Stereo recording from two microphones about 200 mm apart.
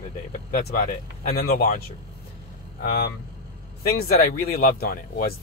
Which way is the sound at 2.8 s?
50° left (ahead or behind).